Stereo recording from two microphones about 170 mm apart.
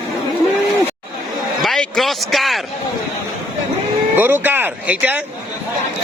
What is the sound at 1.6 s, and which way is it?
Speech, centre (ahead or behind).